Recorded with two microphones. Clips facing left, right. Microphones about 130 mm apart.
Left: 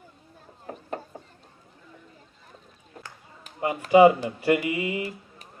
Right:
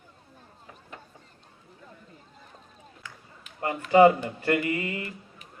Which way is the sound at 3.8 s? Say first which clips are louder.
Left 2 dB; 15° left (ahead or behind).